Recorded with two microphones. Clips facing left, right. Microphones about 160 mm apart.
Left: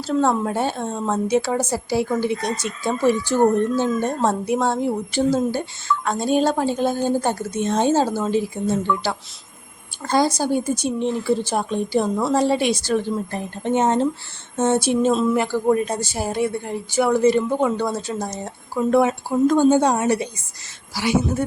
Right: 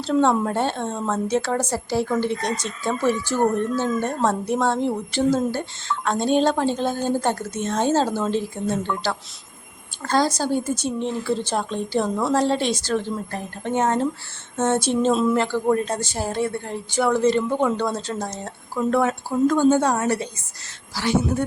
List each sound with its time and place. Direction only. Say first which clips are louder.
0.0 s speech: right 1 dB; 5° left (ahead or behind)
10.0 s speech: left 2 dB; 10° left (ahead or behind)